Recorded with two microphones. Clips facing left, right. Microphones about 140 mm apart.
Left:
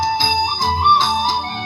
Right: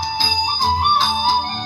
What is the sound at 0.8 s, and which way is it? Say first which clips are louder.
Music: left 6 dB; 90° left.